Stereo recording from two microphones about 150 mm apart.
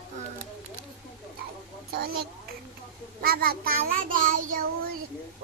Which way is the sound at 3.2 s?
85° right.